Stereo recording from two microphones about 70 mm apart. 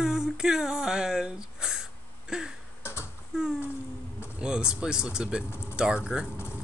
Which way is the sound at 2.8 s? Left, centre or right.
Left.